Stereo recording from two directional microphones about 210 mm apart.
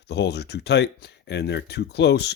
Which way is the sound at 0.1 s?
50° left (ahead or behind).